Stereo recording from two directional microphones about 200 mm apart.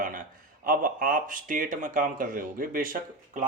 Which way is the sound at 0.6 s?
45° right (ahead or behind).